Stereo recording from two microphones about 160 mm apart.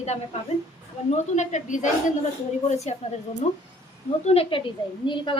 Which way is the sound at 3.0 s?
50° left (ahead or behind).